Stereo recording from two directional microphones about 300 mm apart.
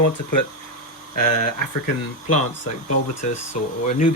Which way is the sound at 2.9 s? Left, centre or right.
Left.